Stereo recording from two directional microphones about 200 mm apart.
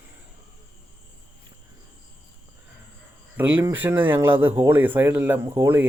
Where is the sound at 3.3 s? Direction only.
10° right (ahead or behind).